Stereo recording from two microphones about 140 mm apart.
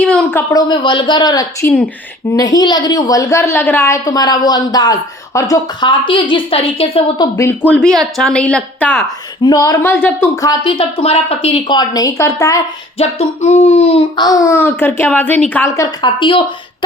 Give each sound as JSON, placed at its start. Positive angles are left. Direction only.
{"t": 0.0, "sound": "a sound", "side_deg": 10}
{"t": 0.5, "sound": "a woman's voice", "side_deg": 35}
{"t": 7.2, "sound": "a woman's voice", "side_deg": 20}
{"t": 9.0, "sound": "a woman's voice", "side_deg": 30}
{"t": 13.0, "sound": "speech", "side_deg": 50}
{"t": 14.2, "sound": "a woman's voice", "side_deg": 25}